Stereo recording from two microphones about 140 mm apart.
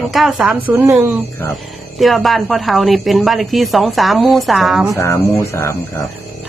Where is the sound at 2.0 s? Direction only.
Centre (ahead or behind).